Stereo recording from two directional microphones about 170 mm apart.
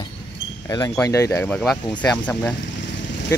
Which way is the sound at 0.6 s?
20° left (ahead or behind).